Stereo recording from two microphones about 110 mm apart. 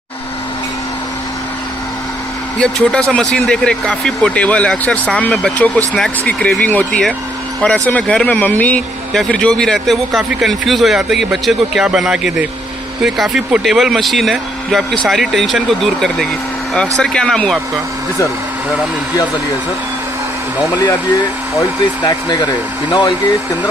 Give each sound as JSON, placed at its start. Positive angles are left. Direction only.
{"t": 2.6, "sound": "speech", "side_deg": 5}
{"t": 21.5, "sound": "speech", "side_deg": 35}